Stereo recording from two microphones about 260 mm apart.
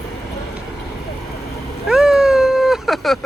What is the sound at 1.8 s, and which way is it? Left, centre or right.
Cat, centre.